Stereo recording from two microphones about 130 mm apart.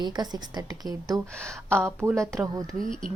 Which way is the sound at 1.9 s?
25° right (ahead or behind).